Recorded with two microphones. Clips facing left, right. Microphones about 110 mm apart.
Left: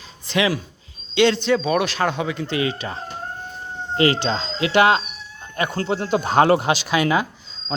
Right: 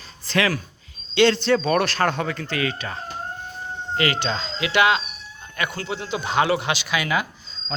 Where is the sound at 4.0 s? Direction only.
35° left (ahead or behind).